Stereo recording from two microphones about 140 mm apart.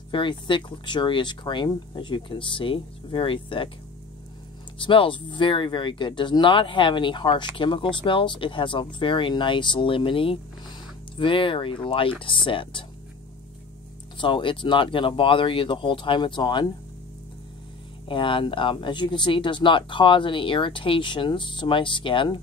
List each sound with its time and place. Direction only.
0.1 s speech: 35° left (ahead or behind)
4.7 s speech: 35° left (ahead or behind)
14.1 s speech: 35° left (ahead or behind)
18.0 s speech: 35° left (ahead or behind)